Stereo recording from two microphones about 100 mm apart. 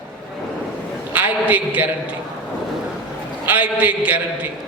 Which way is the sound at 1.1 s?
15° right (ahead or behind).